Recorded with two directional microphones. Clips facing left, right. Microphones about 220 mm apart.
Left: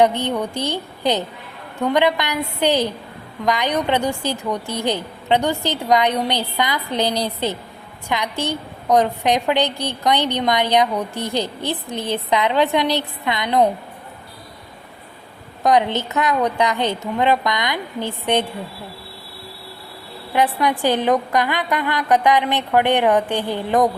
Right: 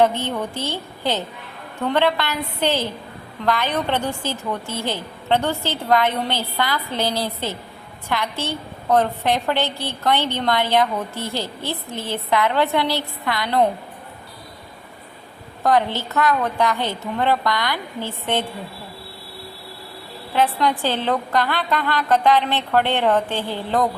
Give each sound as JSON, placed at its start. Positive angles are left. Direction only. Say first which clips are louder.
{"t": 0.0, "sound": "a woman's voice", "louder": "left 2 dB", "side_deg": 15}
{"t": 15.6, "sound": "a woman's voice", "louder": "left 2 dB", "side_deg": 15}
{"t": 20.3, "sound": "a woman's voice", "louder": "left 1 dB", "side_deg": 15}